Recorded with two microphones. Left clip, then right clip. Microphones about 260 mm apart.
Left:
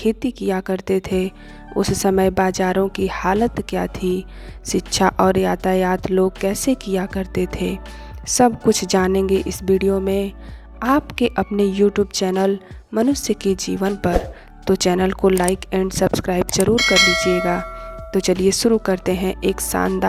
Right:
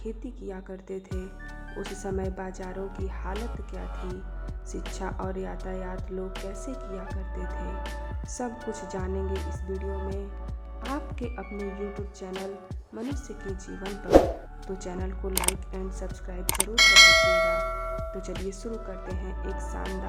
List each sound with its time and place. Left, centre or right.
0.0 s speech: left
16.7 s bell: centre
18.1 s speech: left